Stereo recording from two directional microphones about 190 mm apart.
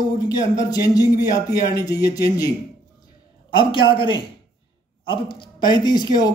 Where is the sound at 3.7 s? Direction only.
25° left (ahead or behind).